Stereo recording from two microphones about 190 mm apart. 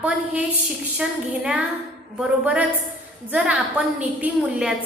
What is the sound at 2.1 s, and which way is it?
A woman's voice, 5° right (ahead or behind).